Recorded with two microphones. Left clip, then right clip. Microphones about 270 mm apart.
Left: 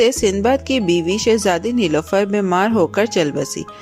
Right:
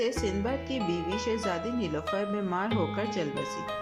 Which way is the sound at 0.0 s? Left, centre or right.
Left.